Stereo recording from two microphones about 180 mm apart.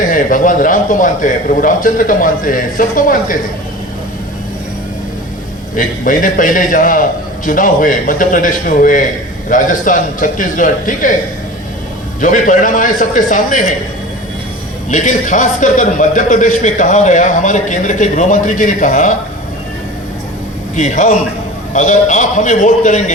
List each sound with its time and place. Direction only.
0.0 s a man's voice: 50° left (ahead or behind)
5.7 s a man's voice: 50° left (ahead or behind)
12.2 s a man's voice: 45° left (ahead or behind)
14.8 s a man's voice: 45° left (ahead or behind)
20.7 s a man's voice: 45° left (ahead or behind)